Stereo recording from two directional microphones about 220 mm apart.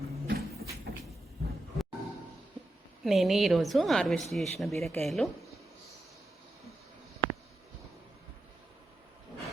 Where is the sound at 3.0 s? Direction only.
Centre (ahead or behind).